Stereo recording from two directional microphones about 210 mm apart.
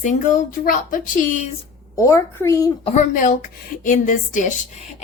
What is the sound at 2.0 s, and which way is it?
Speech, 15° left (ahead or behind).